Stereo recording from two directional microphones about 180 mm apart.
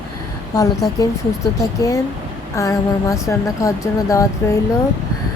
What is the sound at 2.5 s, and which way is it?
Speech, 20° left (ahead or behind).